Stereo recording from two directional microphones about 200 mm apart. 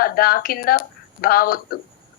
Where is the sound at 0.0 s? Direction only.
45° left (ahead or behind).